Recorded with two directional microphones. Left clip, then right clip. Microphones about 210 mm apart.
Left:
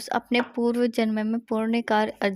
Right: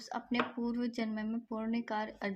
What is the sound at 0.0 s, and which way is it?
Speech, 50° left (ahead or behind).